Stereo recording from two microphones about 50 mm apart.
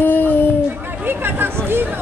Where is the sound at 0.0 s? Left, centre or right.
Left.